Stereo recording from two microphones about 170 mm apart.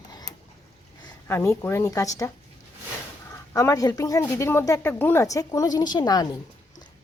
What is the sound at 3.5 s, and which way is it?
Speech, 20° left (ahead or behind).